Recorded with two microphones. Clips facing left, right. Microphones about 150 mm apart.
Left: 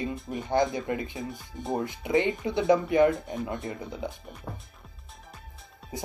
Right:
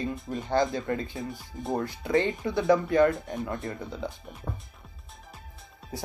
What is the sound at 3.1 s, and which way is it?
Speech, centre (ahead or behind).